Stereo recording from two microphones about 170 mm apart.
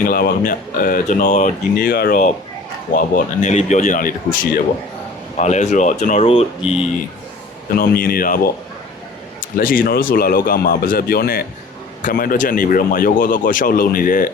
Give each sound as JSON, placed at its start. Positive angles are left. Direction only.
{"t": 0.0, "sound": "speech", "side_deg": 60}
{"t": 5.4, "sound": "speech", "side_deg": 40}
{"t": 7.8, "sound": "speech", "side_deg": 60}
{"t": 9.6, "sound": "speech", "side_deg": 55}